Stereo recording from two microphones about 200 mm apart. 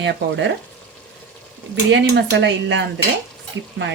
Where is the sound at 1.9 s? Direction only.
60° right (ahead or behind).